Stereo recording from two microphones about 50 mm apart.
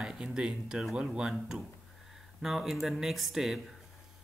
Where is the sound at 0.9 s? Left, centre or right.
Centre.